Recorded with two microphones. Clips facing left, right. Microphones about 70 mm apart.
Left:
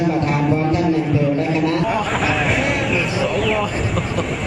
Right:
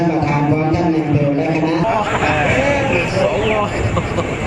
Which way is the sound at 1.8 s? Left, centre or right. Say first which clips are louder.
Right 3 dB; centre.